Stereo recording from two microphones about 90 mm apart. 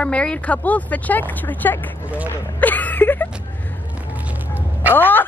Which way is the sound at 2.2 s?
20° left (ahead or behind).